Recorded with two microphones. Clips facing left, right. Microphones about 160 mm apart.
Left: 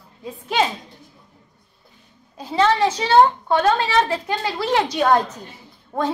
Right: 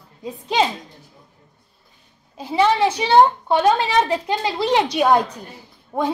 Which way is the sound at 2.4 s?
10° right (ahead or behind).